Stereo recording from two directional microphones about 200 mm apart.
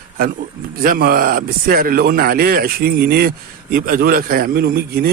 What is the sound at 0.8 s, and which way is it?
Speech, 50° right (ahead or behind).